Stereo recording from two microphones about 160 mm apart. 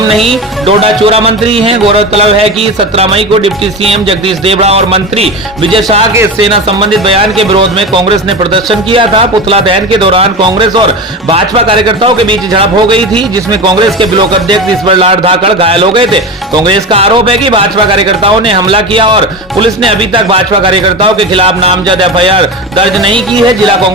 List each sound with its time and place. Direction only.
0.3 s speech: 35° right (ahead or behind)